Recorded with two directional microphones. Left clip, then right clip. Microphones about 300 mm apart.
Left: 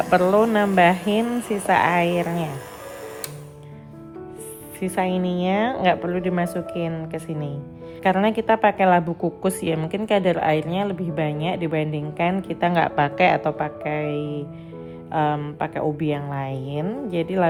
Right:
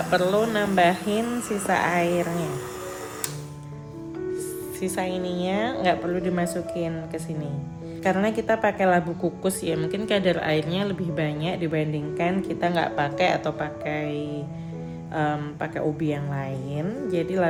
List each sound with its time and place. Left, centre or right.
0.1 s a woman's voice: centre
4.8 s a woman's voice: left